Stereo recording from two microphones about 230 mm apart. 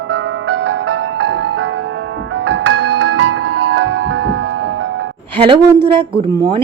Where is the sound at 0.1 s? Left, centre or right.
Right.